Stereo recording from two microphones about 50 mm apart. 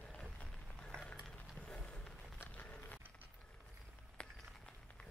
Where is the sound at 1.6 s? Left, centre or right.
Left.